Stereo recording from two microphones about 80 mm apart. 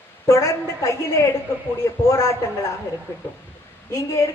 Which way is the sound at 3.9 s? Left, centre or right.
Left.